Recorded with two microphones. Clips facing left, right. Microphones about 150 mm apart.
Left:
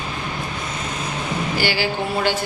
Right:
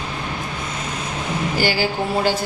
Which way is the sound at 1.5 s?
40° right (ahead or behind).